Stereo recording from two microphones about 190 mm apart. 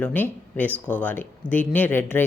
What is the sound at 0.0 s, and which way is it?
Speech, 10° left (ahead or behind).